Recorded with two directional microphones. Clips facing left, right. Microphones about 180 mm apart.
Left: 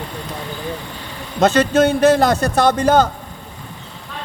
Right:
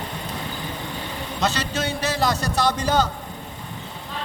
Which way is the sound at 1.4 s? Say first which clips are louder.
Left 12 dB; 50° left (ahead or behind).